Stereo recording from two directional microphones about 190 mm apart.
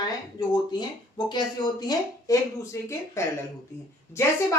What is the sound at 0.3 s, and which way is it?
A woman's voice, 20° left (ahead or behind).